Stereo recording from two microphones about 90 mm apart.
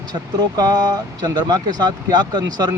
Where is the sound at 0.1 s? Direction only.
50° right (ahead or behind).